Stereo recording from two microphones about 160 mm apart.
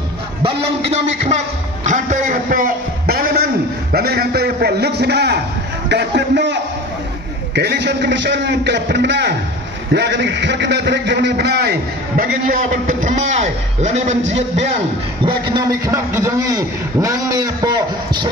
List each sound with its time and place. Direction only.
0.4 s a man's voice: 35° right (ahead or behind)
1.9 s a man's voice: 50° right (ahead or behind); by 3.4 s 70° right (ahead or behind)
3.9 s a man's voice: 85° right; by 14.1 s 45° right (ahead or behind)
15.9 s a man's voice: 15° right (ahead or behind)